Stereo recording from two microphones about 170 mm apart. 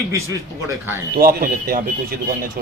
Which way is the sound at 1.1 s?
60° right (ahead or behind).